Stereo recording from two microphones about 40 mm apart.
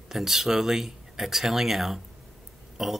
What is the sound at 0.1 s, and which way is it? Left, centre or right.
Speech, centre.